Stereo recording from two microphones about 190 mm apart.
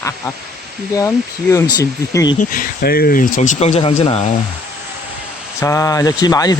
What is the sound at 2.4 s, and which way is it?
Speech, 45° left (ahead or behind).